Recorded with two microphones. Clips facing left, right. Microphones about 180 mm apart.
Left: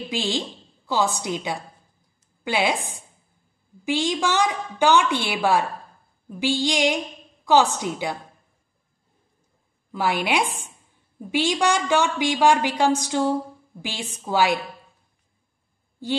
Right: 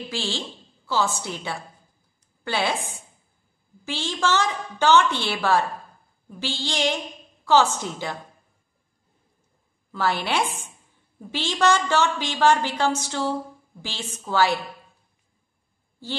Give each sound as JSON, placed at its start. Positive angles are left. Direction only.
{"t": 0.1, "sound": "a woman's voice", "side_deg": 15}
{"t": 9.9, "sound": "a woman's voice", "side_deg": 10}